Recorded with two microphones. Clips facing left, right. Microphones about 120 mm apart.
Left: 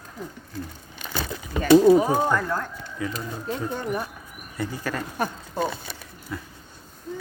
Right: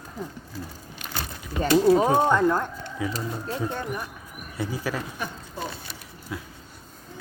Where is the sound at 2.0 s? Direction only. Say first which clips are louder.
Right 2 dB; 20° right (ahead or behind).